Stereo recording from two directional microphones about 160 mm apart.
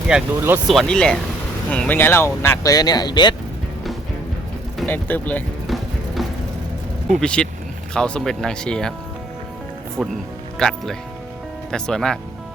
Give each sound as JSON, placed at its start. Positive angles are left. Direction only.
{"t": 0.1, "sound": "speech", "side_deg": -10}
{"t": 0.7, "sound": "speech", "side_deg": 5}
{"t": 4.9, "sound": "speech", "side_deg": 10}
{"t": 5.6, "sound": "music", "side_deg": 0}
{"t": 7.1, "sound": "speech", "side_deg": 5}
{"t": 10.0, "sound": "speech", "side_deg": 0}